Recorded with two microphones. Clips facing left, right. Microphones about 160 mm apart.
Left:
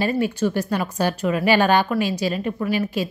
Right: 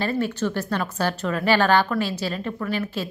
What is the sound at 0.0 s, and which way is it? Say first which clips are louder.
A woman's voice: left 3 dB; 10° left (ahead or behind).